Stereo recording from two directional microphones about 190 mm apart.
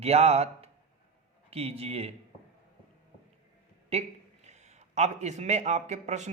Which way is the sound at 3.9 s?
35° right (ahead or behind).